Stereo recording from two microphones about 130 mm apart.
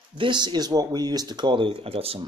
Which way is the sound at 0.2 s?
35° right (ahead or behind).